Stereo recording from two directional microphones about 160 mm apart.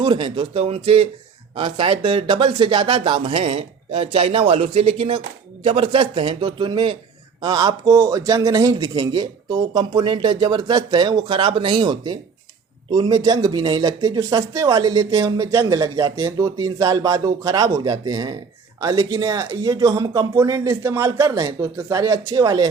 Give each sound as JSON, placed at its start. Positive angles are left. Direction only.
{"t": 0.0, "sound": "speech", "side_deg": -30}